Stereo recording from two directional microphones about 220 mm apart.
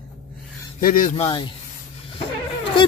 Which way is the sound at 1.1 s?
25° left (ahead or behind).